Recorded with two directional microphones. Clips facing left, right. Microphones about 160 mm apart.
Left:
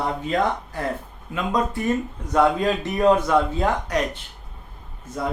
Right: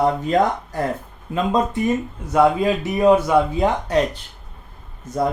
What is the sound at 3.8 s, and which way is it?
Speech, 30° right (ahead or behind).